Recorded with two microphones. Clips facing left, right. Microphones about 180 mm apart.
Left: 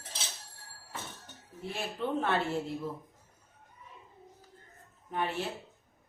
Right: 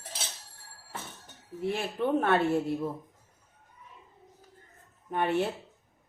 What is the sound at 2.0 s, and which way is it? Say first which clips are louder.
Speech: right 5 dB; 55° right (ahead or behind).